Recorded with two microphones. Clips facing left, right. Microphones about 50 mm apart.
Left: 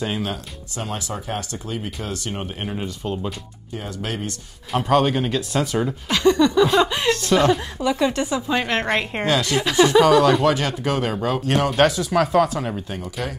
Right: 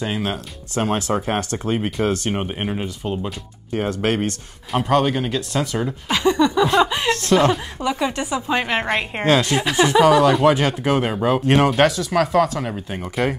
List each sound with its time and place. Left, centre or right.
0.7 s speech: right; by 3.3 s centre
3.7 s speech: right
4.7 s speech: centre
5.9 s speech: centre
9.2 s speech: right
10.0 s speech: centre
10.5 s speech: right
12.2 s speech: centre
12.9 s speech: centre